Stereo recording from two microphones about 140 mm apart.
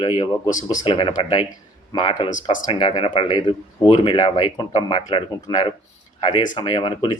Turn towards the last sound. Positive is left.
turn(degrees=35)  # may be behind; listen again after turning